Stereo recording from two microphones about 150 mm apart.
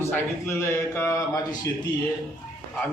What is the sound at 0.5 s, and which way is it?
Speech, 15° left (ahead or behind).